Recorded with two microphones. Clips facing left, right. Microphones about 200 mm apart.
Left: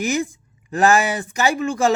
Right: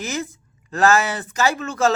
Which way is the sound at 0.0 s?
15° left (ahead or behind).